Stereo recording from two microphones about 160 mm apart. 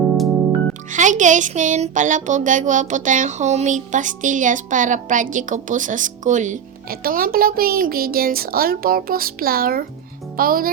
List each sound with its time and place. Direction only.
0.7 s speech: 50° right (ahead or behind)
7.0 s speech: 65° right (ahead or behind)